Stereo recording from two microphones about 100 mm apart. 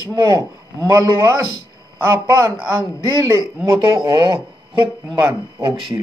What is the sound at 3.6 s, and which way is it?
Speech, 50° right (ahead or behind).